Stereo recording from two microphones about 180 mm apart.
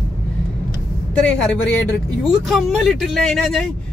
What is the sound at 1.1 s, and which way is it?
A man's voice, 5° left (ahead or behind).